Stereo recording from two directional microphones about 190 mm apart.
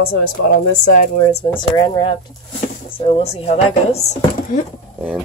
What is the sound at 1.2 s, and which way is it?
Speech, 35° left (ahead or behind).